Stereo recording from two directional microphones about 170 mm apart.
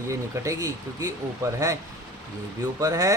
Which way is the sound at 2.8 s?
20° right (ahead or behind).